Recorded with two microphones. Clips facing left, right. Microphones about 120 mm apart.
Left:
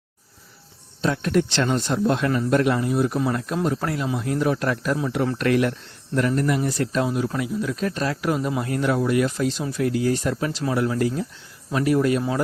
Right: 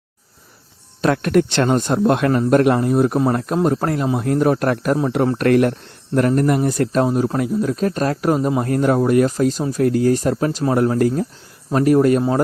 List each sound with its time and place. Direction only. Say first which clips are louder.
1.0 s speech: right 5 dB; 65° right (ahead or behind); by 12.2 s 45° right (ahead or behind)